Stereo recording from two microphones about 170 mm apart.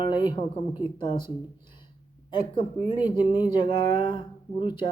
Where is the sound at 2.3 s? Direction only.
30° left (ahead or behind).